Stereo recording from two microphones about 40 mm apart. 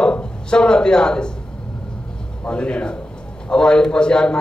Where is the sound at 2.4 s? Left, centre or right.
Left.